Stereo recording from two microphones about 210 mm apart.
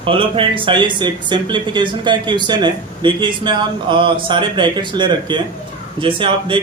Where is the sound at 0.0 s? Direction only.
25° right (ahead or behind).